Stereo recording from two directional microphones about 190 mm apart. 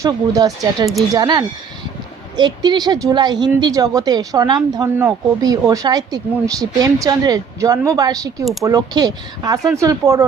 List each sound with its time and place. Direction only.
0.0 s speech: 20° right (ahead or behind)